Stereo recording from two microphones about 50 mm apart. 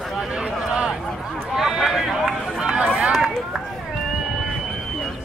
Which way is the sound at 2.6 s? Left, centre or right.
Centre.